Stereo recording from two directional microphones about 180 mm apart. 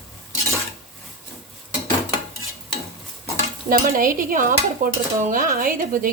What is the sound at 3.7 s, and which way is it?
Dishes, 50° right (ahead or behind).